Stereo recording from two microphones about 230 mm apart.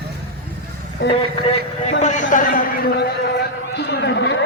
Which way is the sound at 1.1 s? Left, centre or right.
Left.